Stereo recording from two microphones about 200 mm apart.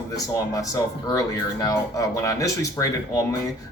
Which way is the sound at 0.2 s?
15° left (ahead or behind).